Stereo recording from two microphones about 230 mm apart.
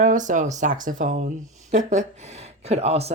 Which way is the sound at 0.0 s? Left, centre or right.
Right.